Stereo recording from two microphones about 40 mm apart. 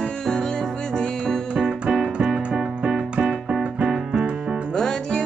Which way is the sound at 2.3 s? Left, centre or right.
Centre.